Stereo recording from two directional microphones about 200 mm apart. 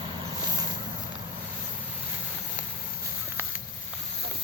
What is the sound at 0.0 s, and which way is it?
Vehicle, 20° right (ahead or behind).